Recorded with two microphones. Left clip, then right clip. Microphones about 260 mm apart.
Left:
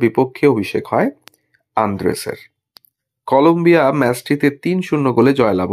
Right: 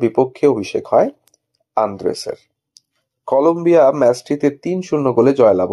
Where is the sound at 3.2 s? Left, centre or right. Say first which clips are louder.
Left 2 dB; left.